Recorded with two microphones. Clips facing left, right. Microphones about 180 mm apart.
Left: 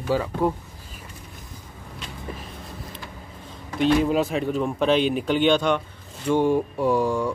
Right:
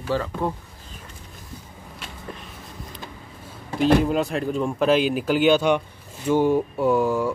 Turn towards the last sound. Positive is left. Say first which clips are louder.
# right 1 dB
turn(degrees=0)  # may be behind; listen again after turning